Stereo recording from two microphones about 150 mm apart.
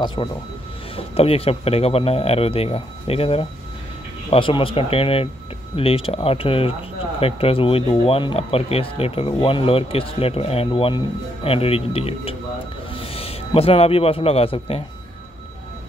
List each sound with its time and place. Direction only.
0.0 s a man's voice: 30° left (ahead or behind)